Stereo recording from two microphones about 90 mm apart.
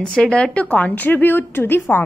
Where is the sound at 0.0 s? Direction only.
10° left (ahead or behind).